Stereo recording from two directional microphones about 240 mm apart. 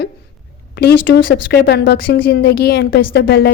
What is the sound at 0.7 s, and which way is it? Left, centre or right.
A woman's voice, left.